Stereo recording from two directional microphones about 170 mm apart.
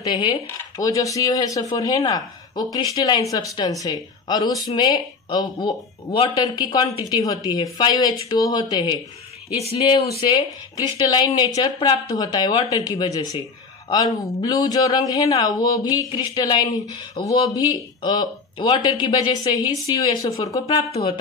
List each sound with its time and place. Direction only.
0.0 s speech: 25° left (ahead or behind)